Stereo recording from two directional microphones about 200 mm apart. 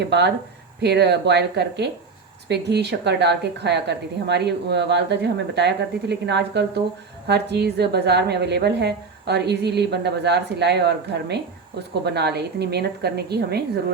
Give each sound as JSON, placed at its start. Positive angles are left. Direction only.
{"t": 0.0, "sound": "a woman's voice", "side_deg": -60}